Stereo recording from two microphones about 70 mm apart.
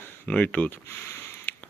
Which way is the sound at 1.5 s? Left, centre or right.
Left.